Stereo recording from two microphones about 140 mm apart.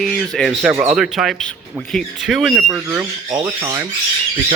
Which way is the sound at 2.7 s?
15° right (ahead or behind).